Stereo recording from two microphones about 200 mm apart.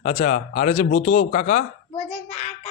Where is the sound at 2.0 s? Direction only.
5° left (ahead or behind).